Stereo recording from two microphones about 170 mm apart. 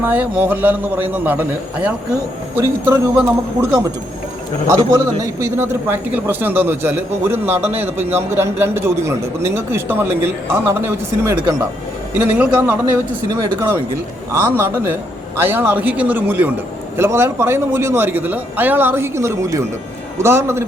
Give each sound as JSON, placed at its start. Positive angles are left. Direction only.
{"t": 0.0, "sound": "a man's voice", "side_deg": -10}
{"t": 4.7, "sound": "a man's voice", "side_deg": -20}
{"t": 13.3, "sound": "a man's voice", "side_deg": -20}